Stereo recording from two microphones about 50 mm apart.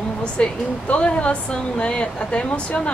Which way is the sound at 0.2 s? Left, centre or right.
Left.